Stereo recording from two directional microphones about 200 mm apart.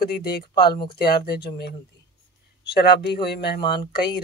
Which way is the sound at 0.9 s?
50° left (ahead or behind).